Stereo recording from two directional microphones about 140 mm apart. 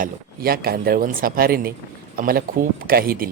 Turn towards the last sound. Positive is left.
turn(degrees=-90)